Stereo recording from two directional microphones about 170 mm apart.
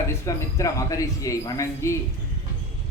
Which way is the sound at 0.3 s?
20° left (ahead or behind).